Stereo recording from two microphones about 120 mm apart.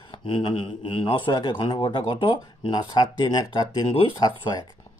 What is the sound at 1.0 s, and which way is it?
Speech, 40° left (ahead or behind).